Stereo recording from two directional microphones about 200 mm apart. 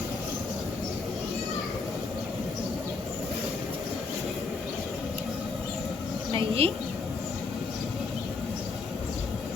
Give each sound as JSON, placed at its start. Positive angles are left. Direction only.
{"t": 6.3, "sound": "a woman's voice", "side_deg": -25}